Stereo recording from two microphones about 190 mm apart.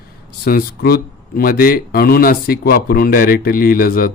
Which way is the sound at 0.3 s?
55° left (ahead or behind).